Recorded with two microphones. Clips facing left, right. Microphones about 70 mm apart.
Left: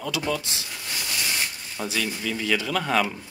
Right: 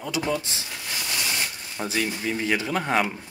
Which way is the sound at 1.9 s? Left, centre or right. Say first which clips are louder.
Right 2 dB; right.